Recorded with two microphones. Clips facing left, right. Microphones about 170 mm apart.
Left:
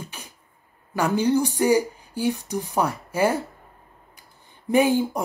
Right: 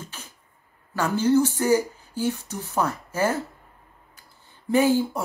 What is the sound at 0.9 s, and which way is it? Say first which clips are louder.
Speech: even; 15° left (ahead or behind).